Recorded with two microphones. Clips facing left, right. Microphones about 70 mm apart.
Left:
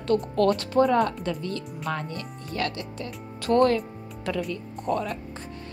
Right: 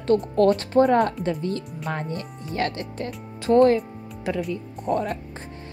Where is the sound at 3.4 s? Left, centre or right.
Centre.